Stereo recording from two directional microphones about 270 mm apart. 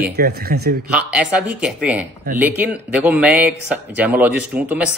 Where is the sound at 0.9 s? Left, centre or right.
Centre.